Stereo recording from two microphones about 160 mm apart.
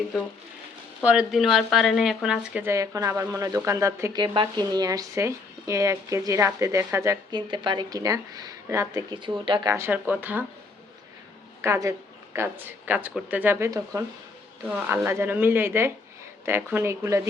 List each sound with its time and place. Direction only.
1.0 s speech: 5° right (ahead or behind)
11.6 s speech: 20° right (ahead or behind)